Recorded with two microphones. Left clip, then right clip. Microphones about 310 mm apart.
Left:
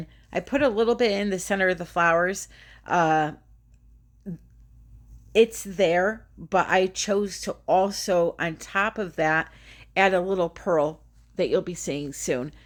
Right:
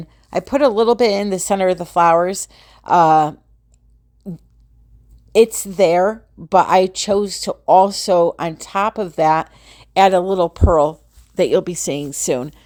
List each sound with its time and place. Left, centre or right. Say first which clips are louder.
0.0 s speech: right 8 dB; centre
4.2 s a sound: right 6 dB; centre
5.3 s speech: right 7 dB; right